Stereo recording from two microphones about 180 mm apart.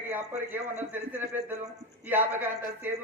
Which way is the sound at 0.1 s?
10° right (ahead or behind).